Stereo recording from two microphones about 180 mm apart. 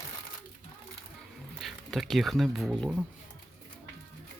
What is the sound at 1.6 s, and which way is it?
Speech, centre (ahead or behind).